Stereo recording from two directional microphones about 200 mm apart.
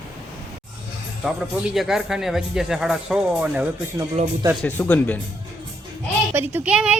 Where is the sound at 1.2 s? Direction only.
Centre (ahead or behind).